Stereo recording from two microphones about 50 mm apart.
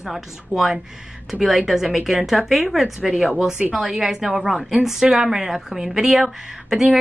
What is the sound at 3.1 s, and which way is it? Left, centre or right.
Speech, right.